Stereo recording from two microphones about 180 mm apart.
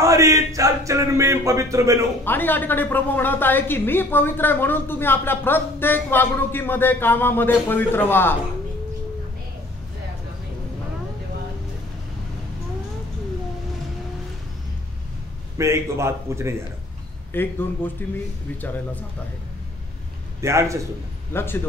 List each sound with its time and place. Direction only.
0.0 s a sound: 15° right (ahead or behind)
2.2 s a woman's voice: 10° left (ahead or behind)
15.5 s a man's voice: 15° right (ahead or behind)
17.3 s a woman's voice: 10° left (ahead or behind)
20.3 s a man's voice: 15° right (ahead or behind)
21.3 s a man's voice: 15° left (ahead or behind)